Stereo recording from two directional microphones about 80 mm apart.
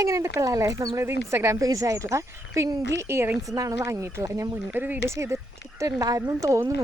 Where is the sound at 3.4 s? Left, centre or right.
Right.